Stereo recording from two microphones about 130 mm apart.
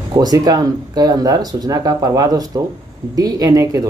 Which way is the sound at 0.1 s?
30° right (ahead or behind).